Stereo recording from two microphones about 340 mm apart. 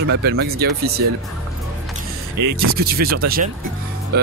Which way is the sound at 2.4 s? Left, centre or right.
Right.